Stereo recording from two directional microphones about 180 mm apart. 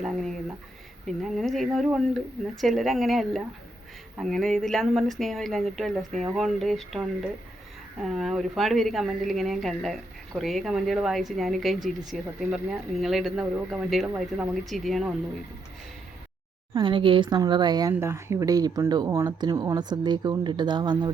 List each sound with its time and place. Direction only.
0.0 s a woman's voice: centre (ahead or behind)
16.7 s a woman's voice: 30° right (ahead or behind)